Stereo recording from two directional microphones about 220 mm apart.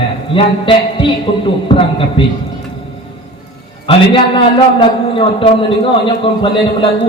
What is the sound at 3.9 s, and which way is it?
A man's voice, 25° left (ahead or behind).